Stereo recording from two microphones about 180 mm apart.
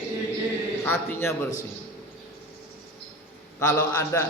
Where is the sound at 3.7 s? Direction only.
15° left (ahead or behind).